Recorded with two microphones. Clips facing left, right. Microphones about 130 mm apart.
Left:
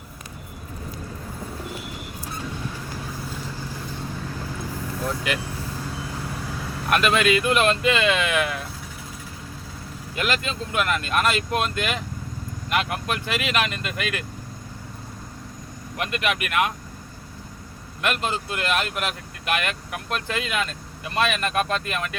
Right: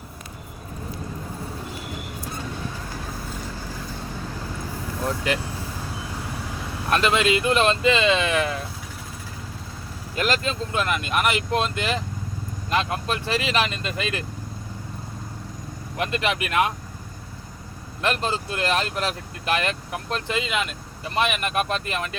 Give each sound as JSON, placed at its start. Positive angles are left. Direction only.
{"t": 6.9, "sound": "speech", "side_deg": -25}
{"t": 10.2, "sound": "speech", "side_deg": -35}
{"t": 16.0, "sound": "speech", "side_deg": -30}
{"t": 18.0, "sound": "speech", "side_deg": -30}